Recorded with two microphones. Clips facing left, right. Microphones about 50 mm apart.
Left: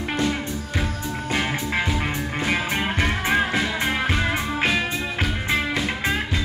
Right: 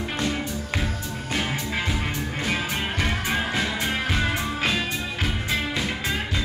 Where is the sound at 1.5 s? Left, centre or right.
Left.